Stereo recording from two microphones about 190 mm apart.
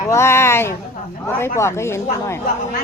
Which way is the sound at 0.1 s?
15° left (ahead or behind).